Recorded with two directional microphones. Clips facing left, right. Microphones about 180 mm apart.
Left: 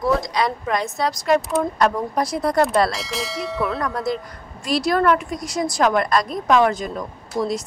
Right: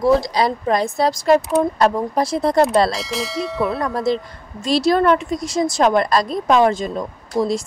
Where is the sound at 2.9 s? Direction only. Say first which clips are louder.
Right 3 dB; centre (ahead or behind).